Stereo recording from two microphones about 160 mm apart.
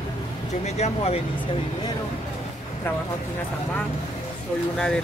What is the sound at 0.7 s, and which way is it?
Speech, 40° left (ahead or behind).